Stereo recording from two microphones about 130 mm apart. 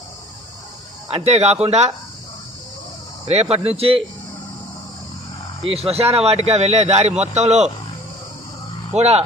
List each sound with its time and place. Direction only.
1.1 s a man's voice: 55° right (ahead or behind)
3.2 s speech: 55° right (ahead or behind)
5.6 s a man's voice: 50° right (ahead or behind)
8.9 s a man's voice: 55° right (ahead or behind)